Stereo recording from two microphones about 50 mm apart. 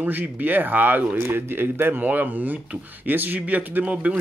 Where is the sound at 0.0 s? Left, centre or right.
Right.